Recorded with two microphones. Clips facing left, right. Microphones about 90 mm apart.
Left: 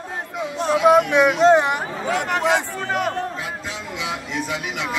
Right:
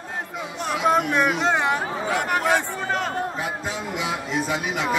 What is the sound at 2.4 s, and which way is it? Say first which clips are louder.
Speech: left 2 dB; 15° left (ahead or behind).